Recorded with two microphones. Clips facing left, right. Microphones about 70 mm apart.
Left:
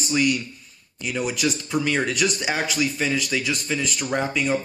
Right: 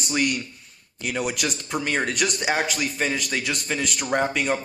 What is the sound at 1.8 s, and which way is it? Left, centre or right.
Speech, right.